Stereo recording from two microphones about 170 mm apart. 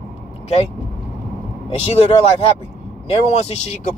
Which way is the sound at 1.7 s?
40° left (ahead or behind).